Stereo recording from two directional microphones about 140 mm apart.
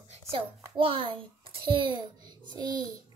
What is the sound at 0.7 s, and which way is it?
A child's voice, 40° right (ahead or behind).